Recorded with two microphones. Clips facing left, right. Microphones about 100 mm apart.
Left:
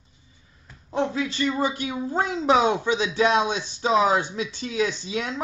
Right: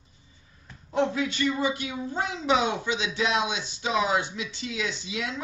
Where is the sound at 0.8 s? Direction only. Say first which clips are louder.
Even; 30° left (ahead or behind).